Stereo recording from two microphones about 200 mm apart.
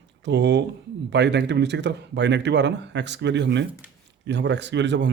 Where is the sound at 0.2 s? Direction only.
60° right (ahead or behind).